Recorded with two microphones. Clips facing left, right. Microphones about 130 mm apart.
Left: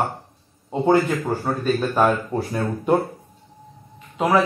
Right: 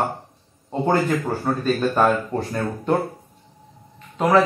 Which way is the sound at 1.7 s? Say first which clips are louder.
Even; 5° left (ahead or behind).